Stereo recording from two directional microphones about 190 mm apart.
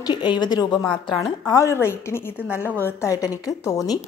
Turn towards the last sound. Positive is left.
turn(degrees=20)  # may be behind; listen again after turning